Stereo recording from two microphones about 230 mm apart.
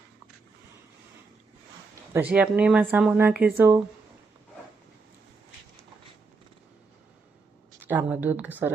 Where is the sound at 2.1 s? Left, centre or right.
Centre.